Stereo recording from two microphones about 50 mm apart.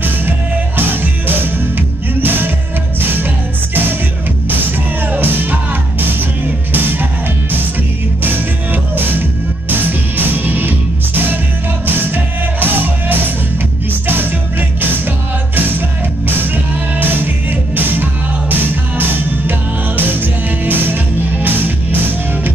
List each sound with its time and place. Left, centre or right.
0.7 s music: right
5.0 s music: right
8.9 s music: right
11.8 s music: right
15.5 s music: right